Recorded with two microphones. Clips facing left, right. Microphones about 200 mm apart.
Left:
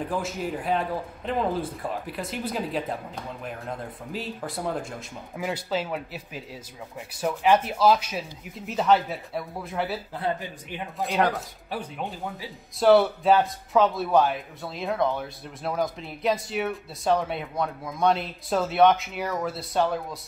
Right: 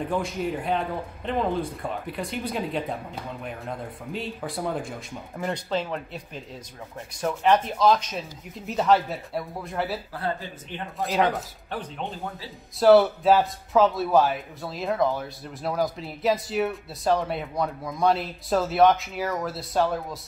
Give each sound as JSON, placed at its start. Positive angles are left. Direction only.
{"t": 0.0, "sound": "a man's voice", "side_deg": 0}
{"t": 10.1, "sound": "speech", "side_deg": 15}
{"t": 11.0, "sound": "a man's voice", "side_deg": 0}
{"t": 12.7, "sound": "a man's voice", "side_deg": 0}